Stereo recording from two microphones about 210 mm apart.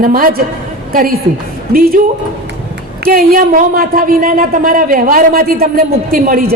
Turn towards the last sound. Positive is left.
turn(degrees=-45)  # may be behind; listen again after turning